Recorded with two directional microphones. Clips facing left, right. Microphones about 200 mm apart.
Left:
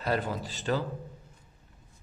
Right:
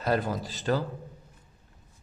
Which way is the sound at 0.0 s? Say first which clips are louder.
Right 3 dB; 40° right (ahead or behind).